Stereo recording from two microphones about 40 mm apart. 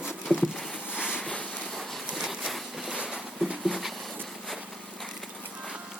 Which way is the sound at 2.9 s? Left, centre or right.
Right.